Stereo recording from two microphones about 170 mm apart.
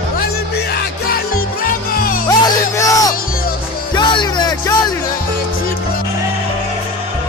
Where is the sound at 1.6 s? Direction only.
60° left (ahead or behind).